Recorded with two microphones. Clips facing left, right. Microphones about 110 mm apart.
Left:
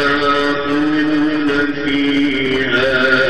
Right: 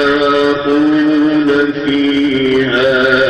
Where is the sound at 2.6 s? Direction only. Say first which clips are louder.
Right 4 dB; 5° right (ahead or behind).